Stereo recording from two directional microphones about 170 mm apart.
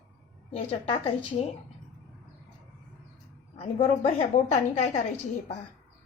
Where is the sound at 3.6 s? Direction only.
40° left (ahead or behind).